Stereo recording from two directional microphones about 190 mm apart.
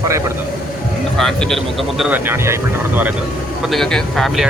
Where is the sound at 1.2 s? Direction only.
Centre (ahead or behind).